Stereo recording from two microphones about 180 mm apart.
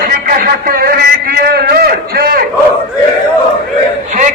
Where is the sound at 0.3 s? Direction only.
55° right (ahead or behind).